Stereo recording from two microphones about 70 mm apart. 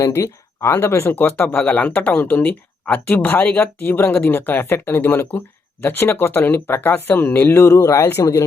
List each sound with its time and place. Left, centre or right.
0.0 s speech: left